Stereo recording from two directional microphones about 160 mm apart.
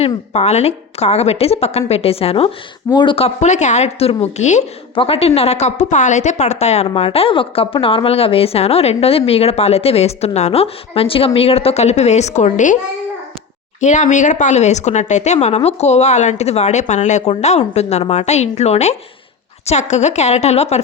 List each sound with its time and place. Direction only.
0.0 s a woman's voice: 40° left (ahead or behind)
13.8 s a woman's voice: 50° left (ahead or behind)